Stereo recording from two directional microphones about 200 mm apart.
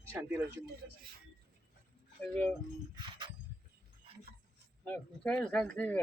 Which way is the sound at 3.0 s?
25° right (ahead or behind).